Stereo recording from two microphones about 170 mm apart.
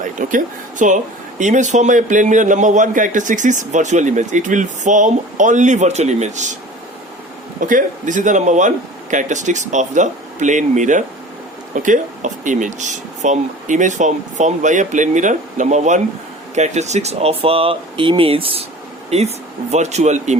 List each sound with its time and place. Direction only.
0.2 s a man's voice: 50° right (ahead or behind)
7.7 s a man's voice: 50° right (ahead or behind)